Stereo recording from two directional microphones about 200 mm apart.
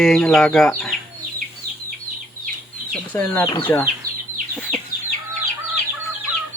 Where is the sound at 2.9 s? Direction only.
10° left (ahead or behind).